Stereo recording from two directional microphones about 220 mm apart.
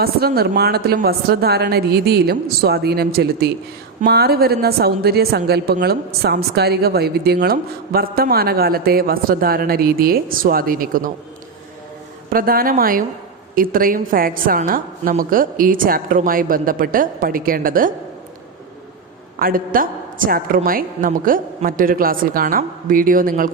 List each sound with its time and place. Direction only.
0.0 s a woman's voice: 45° right (ahead or behind)
12.3 s a woman's voice: 40° right (ahead or behind)
19.4 s a woman's voice: 40° right (ahead or behind)